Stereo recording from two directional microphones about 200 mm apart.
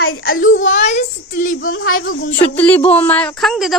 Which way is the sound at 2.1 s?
70° left (ahead or behind).